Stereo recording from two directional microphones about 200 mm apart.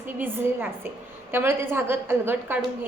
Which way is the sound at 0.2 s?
10° right (ahead or behind).